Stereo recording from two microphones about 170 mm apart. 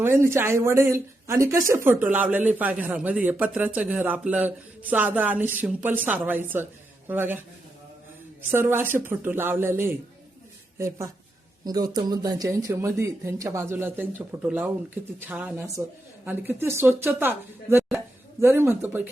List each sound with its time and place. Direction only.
0.0 s speech: 15° right (ahead or behind)
8.5 s speech: 15° right (ahead or behind)